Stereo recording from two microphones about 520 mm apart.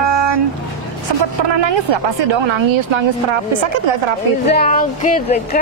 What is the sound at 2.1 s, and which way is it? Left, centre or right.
A woman's voice, right.